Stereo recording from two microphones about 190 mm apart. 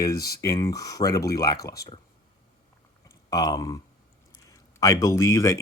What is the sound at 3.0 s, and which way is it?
Speech, 20° left (ahead or behind).